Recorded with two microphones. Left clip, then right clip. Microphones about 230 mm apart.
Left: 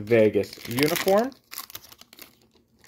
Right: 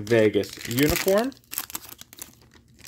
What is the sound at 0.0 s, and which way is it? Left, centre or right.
Speech, centre.